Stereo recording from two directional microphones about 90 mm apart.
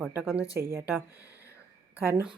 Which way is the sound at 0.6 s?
25° right (ahead or behind).